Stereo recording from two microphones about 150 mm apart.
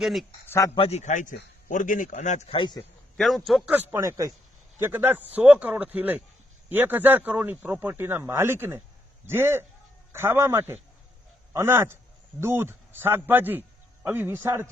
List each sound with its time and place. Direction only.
0.0 s a man's voice: centre (ahead or behind)
0.8 s a man's voice: 45° left (ahead or behind)
2.5 s a man's voice: 30° left (ahead or behind)
3.2 s a man's voice: centre (ahead or behind)
3.8 s a man's voice: 20° right (ahead or behind)